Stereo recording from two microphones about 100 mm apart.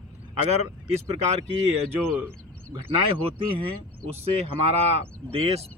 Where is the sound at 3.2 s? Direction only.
80° right.